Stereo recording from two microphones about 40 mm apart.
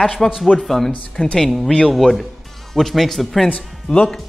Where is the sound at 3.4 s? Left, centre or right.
Left.